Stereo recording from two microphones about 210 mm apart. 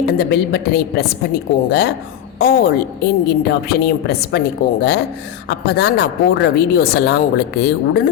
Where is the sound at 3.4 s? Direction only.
50° left (ahead or behind).